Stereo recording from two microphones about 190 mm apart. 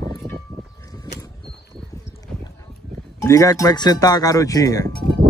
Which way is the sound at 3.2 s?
20° left (ahead or behind).